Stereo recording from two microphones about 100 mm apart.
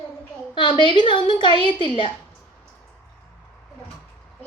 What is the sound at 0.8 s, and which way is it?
A woman's voice, 55° left (ahead or behind).